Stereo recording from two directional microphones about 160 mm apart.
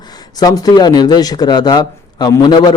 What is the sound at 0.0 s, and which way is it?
Speech, 25° left (ahead or behind).